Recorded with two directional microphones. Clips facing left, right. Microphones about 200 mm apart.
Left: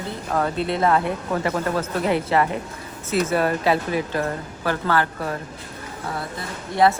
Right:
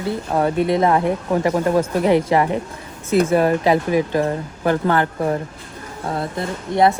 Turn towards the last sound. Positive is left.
turn(degrees=-25)  # may be behind; listen again after turning